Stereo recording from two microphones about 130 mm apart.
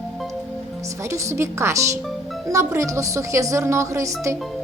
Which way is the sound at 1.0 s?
20° right (ahead or behind).